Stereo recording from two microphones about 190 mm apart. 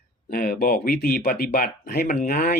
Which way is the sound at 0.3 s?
50° left (ahead or behind).